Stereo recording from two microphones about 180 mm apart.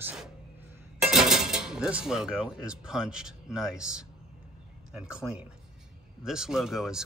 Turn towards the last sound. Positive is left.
turn(degrees=-5)  # may be behind; listen again after turning